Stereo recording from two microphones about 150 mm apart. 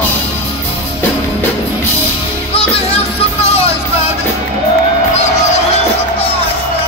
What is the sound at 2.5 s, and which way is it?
Music, 40° left (ahead or behind).